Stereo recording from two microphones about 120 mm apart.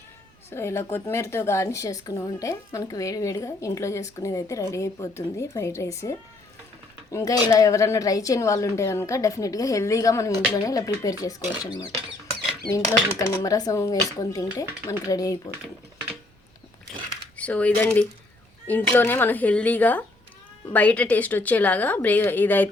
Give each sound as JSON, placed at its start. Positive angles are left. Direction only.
{"t": 0.5, "sound": "speech", "side_deg": 20}
{"t": 13.1, "sound": "speech", "side_deg": 25}
{"t": 17.3, "sound": "speech", "side_deg": 10}